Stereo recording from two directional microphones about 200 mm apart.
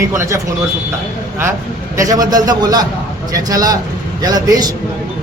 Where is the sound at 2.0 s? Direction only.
20° right (ahead or behind).